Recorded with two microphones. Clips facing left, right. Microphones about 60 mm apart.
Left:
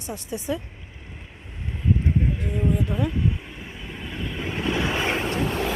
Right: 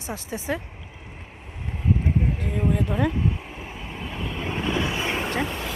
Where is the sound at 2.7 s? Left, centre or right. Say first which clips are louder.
Right 2 dB; right.